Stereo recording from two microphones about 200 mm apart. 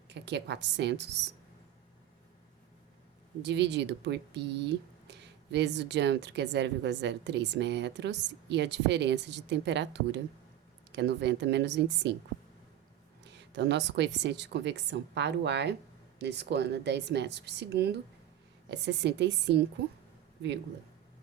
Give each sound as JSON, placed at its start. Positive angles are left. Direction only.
{"t": 0.1, "sound": "speech", "side_deg": -60}
{"t": 3.4, "sound": "speech", "side_deg": -60}
{"t": 13.2, "sound": "speech", "side_deg": -60}